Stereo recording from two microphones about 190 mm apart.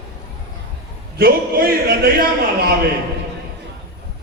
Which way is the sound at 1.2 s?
55° right (ahead or behind).